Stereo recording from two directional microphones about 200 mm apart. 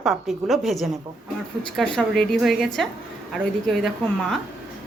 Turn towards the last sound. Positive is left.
turn(degrees=0)  # may be behind; listen again after turning